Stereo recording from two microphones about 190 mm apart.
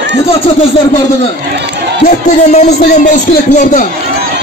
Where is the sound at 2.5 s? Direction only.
40° left (ahead or behind).